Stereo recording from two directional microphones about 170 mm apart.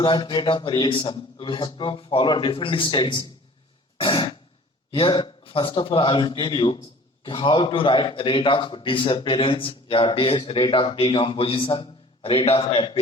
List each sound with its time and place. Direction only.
0.0 s a man's voice: 30° left (ahead or behind)